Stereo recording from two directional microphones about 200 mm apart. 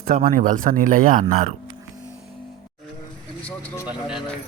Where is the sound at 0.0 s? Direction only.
45° right (ahead or behind).